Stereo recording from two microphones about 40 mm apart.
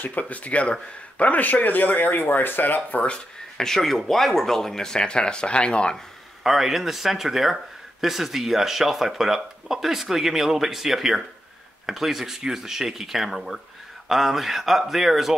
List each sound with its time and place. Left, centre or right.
0.3 s speech: left
3.5 s speech: centre
6.4 s speech: centre